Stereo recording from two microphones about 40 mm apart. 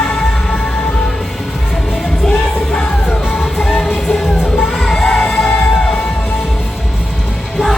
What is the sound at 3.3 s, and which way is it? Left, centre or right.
Music, centre.